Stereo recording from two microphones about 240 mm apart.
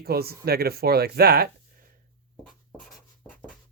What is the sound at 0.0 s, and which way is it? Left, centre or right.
Speech, right.